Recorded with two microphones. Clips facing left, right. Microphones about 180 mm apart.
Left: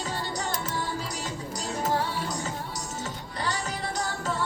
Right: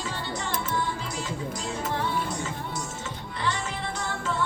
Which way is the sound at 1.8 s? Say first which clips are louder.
Left 5 dB; 40° left (ahead or behind).